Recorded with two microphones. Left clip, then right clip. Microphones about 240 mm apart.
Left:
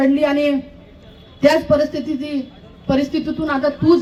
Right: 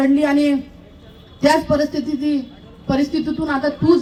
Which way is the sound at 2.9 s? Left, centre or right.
Left.